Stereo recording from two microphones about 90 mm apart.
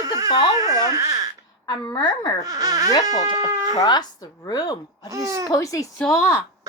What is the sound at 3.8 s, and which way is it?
A woman's voice, 50° left (ahead or behind).